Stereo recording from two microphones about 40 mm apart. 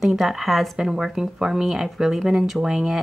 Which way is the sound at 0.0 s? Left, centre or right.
Centre.